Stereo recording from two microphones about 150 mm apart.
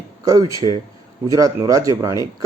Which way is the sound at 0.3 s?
25° right (ahead or behind).